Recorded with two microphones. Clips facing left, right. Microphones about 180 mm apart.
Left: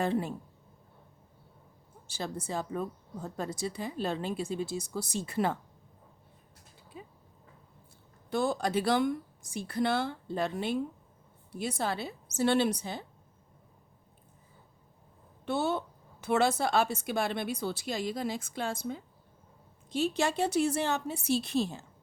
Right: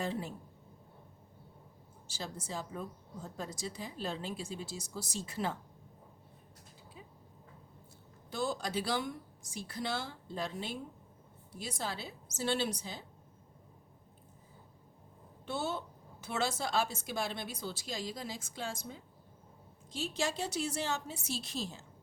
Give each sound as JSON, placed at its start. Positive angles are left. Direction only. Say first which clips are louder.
{"t": 0.0, "sound": "a woman's voice", "louder": "left 7 dB", "side_deg": 60}
{"t": 2.0, "sound": "a woman's voice", "louder": "left 6 dB", "side_deg": 60}
{"t": 6.9, "sound": "a sound", "louder": "left 7 dB", "side_deg": 60}
{"t": 8.3, "sound": "a woman's voice", "louder": "left 6 dB", "side_deg": 55}
{"t": 15.4, "sound": "a woman's voice", "louder": "left 7 dB", "side_deg": 60}